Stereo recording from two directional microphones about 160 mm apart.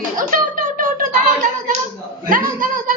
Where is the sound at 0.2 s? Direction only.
55° right (ahead or behind).